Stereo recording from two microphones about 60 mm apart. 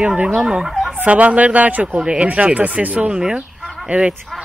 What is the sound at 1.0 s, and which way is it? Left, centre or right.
Speech, right.